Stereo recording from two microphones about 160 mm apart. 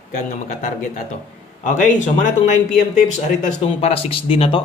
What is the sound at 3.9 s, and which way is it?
Speech, 35° left (ahead or behind).